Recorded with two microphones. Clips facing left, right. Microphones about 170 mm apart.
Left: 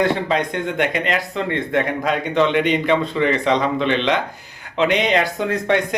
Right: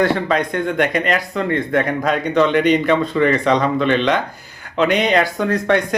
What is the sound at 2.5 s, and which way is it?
Speech, 45° right (ahead or behind).